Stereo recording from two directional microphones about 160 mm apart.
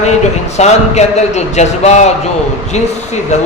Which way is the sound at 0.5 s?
45° left (ahead or behind).